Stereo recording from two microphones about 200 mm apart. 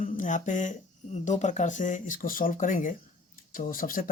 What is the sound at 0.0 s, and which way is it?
Speech, 40° left (ahead or behind).